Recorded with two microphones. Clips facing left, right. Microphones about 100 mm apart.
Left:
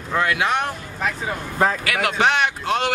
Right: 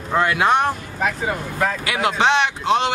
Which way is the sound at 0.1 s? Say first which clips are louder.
Right 3 dB; 30° right (ahead or behind).